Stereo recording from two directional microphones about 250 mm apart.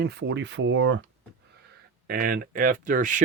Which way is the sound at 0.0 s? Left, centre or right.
Right.